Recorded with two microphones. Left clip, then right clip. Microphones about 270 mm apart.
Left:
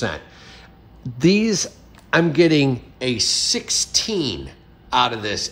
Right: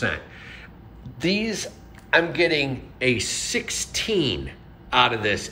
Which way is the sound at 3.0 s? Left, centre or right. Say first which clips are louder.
Left 2 dB; centre.